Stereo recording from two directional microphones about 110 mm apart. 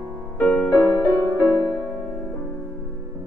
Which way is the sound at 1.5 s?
35° right (ahead or behind).